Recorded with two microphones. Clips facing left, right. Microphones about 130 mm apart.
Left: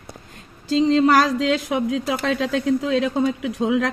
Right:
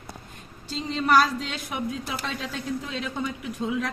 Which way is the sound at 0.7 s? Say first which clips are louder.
Left 7 dB; 90° left.